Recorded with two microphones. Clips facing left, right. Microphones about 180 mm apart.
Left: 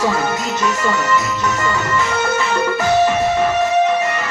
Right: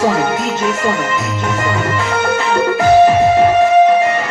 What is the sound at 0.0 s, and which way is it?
Speech, 55° right (ahead or behind).